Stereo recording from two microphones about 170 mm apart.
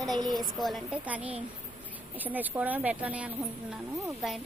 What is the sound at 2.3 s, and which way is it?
Speech, 10° right (ahead or behind).